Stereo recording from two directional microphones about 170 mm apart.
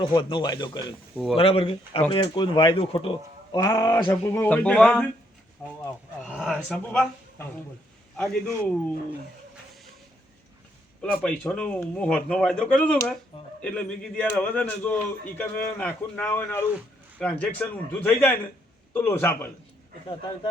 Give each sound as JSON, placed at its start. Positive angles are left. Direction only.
{"t": 0.0, "sound": "speech", "side_deg": 30}
{"t": 1.1, "sound": "speech", "side_deg": -5}
{"t": 1.4, "sound": "speech", "side_deg": 35}
{"t": 3.5, "sound": "speech", "side_deg": 20}
{"t": 6.2, "sound": "a man's voice", "side_deg": -5}
{"t": 6.8, "sound": "a man's voice", "side_deg": 10}
{"t": 11.2, "sound": "speech", "side_deg": 5}